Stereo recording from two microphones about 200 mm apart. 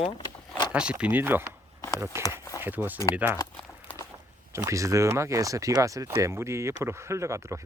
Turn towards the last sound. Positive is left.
turn(degrees=-15)  # may be behind; listen again after turning